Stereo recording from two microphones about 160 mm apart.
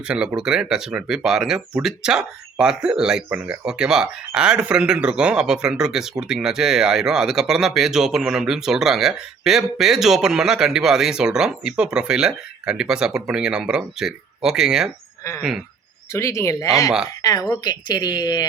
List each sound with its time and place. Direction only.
0.1 s speech: 5° right (ahead or behind)
16.1 s speech: 20° left (ahead or behind)